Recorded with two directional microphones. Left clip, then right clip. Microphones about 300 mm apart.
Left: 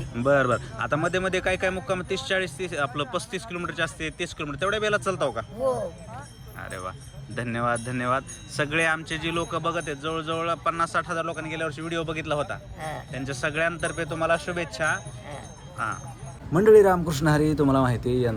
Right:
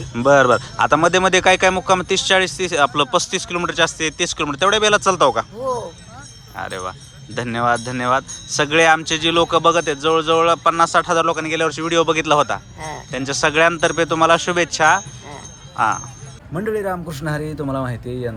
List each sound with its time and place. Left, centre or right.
0.1 s speech: centre
6.6 s speech: centre
16.6 s speech: centre